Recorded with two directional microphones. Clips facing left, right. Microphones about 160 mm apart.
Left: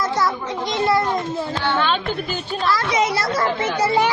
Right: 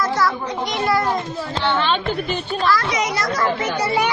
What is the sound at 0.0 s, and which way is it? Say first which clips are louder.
A child's voice: right 1 dB; 20° left (ahead or behind).